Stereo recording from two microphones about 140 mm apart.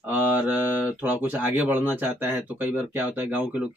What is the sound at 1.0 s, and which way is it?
Speech, 15° right (ahead or behind).